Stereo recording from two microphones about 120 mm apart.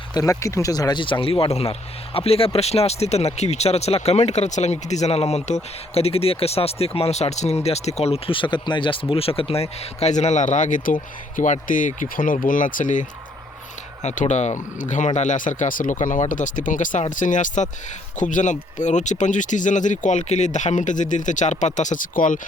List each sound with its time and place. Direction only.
0.1 s speech: 30° left (ahead or behind); by 13.1 s 90° left
14.0 s speech: 75° left (ahead or behind)